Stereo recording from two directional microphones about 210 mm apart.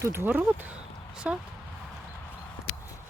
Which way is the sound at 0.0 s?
10° right (ahead or behind).